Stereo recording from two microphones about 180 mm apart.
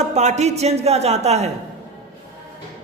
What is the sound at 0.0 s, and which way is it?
A woman's voice, 40° right (ahead or behind).